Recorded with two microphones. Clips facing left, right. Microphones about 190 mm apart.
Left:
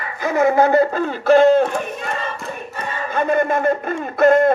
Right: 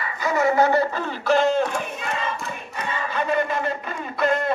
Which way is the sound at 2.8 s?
50° left (ahead or behind).